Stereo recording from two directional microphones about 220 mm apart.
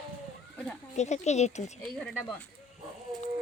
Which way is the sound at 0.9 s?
30° left (ahead or behind).